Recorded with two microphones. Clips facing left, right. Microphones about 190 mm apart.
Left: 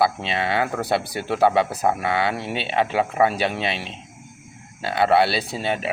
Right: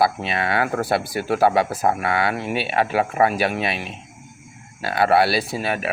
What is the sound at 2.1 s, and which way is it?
Speech, 30° left (ahead or behind).